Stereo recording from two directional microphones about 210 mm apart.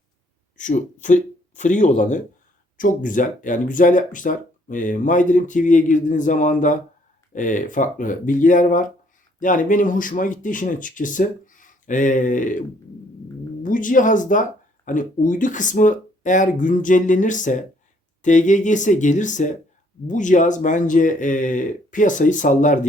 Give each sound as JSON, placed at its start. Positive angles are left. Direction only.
{"t": 0.5, "sound": "speech", "side_deg": 35}